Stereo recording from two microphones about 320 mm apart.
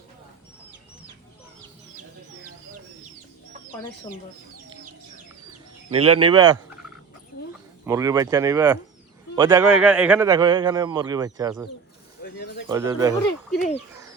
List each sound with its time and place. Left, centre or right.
5.9 s a man's voice: centre
7.9 s a man's voice: centre
12.2 s bird: left
12.6 s a man's voice: centre